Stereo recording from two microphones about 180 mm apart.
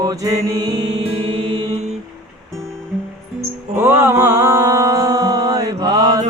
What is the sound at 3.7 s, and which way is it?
Music, 10° right (ahead or behind).